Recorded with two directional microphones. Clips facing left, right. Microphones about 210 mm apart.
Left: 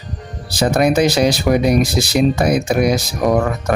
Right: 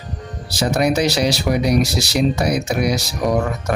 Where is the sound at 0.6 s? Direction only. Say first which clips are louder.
Left 3 dB; 55° left (ahead or behind).